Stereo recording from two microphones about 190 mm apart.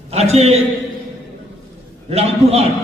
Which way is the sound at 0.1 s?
35° right (ahead or behind).